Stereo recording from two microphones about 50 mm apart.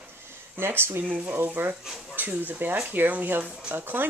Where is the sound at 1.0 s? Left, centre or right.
Right.